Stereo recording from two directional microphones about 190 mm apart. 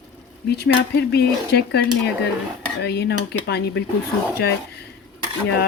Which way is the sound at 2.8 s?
60° left (ahead or behind).